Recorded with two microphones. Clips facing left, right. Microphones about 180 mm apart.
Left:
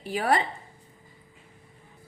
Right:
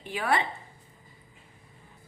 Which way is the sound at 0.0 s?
40° left (ahead or behind).